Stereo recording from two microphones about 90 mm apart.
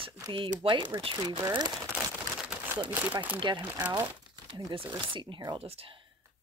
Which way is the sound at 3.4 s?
60° right (ahead or behind).